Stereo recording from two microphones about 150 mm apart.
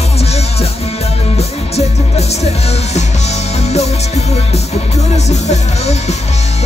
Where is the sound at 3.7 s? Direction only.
45° left (ahead or behind).